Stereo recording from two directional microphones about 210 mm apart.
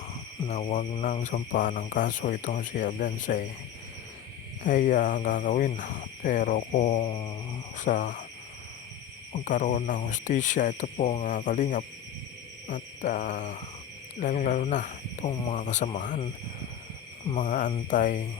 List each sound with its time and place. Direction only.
0.4 s speech: 35° left (ahead or behind)
4.6 s speech: 40° left (ahead or behind); by 7.3 s 25° left (ahead or behind)
7.8 s speech: 40° left (ahead or behind)
9.3 s speech: 35° left (ahead or behind)
12.6 s owl: 40° left (ahead or behind)
14.2 s speech: 40° left (ahead or behind)
15.3 s speech: 20° left (ahead or behind)
15.5 s speech: 35° left (ahead or behind)
17.3 s speech: 35° left (ahead or behind)